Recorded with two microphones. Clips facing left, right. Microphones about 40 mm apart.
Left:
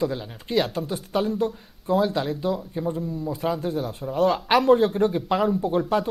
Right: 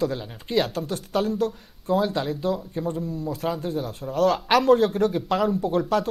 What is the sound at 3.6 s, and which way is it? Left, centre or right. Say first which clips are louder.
Speech: left 1 dB; left.